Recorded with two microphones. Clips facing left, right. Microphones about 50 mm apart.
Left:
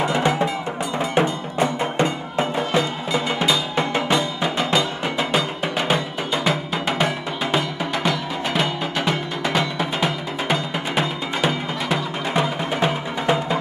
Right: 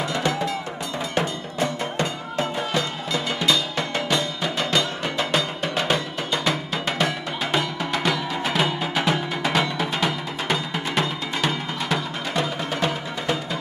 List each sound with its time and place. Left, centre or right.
0.0 s music: left